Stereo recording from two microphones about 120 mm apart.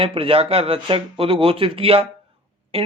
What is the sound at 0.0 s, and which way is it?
Speech, 50° right (ahead or behind).